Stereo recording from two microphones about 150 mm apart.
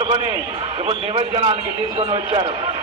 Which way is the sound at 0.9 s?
40° right (ahead or behind).